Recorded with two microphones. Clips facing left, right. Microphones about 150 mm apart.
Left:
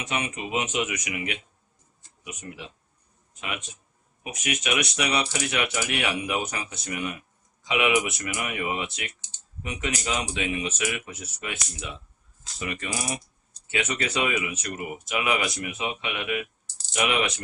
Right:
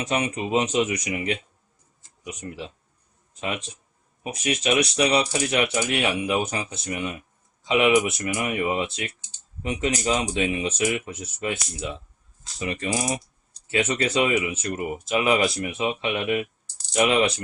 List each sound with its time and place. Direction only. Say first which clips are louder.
0.0 s speech: right 5 dB; 35° right (ahead or behind)
4.2 s speech: right 5 dB; 35° right (ahead or behind)